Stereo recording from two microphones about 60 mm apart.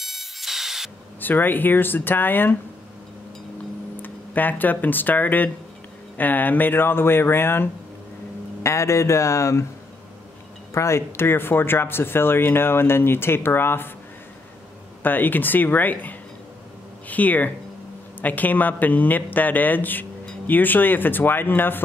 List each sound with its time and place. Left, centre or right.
0.0 s a sound: centre
1.2 s speech: left
3.9 s speech: left
8.6 s speech: left
10.7 s speech: left
15.0 s speech: left